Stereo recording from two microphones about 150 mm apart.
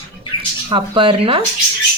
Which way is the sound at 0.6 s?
35° right (ahead or behind).